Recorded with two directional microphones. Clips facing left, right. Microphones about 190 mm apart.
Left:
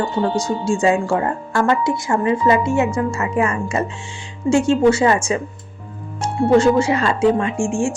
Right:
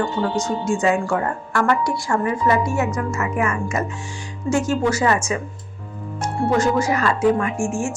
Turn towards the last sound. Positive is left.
turn(degrees=30)  # may be behind; listen again after turning